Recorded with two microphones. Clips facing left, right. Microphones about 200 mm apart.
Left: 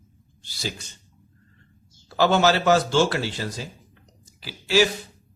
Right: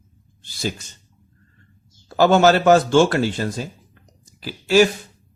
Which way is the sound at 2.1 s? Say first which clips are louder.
Right 5 dB; 45° right (ahead or behind).